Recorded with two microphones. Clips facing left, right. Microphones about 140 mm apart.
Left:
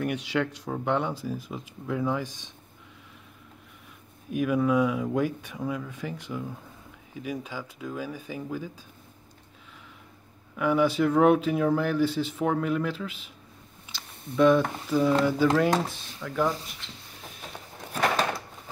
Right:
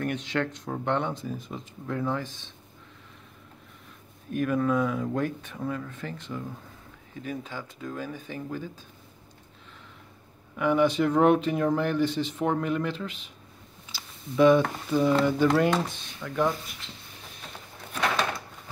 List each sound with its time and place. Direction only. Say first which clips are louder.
0.0 s speech: left 1 dB; 10° left (ahead or behind)
4.3 s speech: left 1 dB; 10° left (ahead or behind)
10.5 s speech: right 1 dB; 5° left (ahead or behind)
13.9 s a sound: even; centre (ahead or behind)
14.3 s speech: right 1 dB; centre (ahead or behind)
17.9 s a sound: left 2 dB; 40° left (ahead or behind)